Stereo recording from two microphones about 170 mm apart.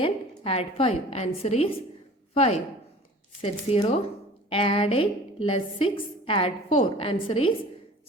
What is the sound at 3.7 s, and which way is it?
A woman's voice, 35° left (ahead or behind).